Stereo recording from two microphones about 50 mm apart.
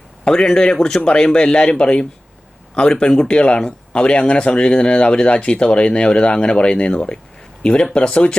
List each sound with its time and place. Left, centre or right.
0.3 s speech: centre